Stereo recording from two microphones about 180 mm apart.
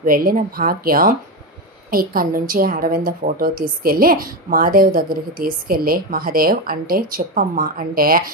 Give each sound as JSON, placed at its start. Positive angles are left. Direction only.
{"t": 0.0, "sound": "a woman's voice", "side_deg": -55}